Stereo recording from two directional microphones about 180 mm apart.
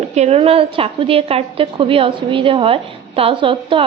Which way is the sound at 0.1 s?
35° right (ahead or behind).